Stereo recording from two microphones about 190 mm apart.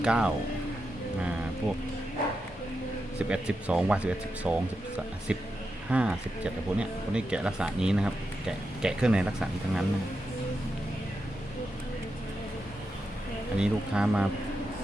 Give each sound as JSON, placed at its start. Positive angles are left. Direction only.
{"t": 0.0, "sound": "speech", "side_deg": -5}
{"t": 3.2, "sound": "speech", "side_deg": -5}
{"t": 13.6, "sound": "speech", "side_deg": -5}